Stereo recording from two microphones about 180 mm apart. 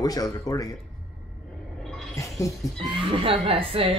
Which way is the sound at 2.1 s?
15° left (ahead or behind).